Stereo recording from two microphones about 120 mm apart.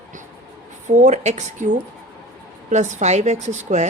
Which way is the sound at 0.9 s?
75° right (ahead or behind).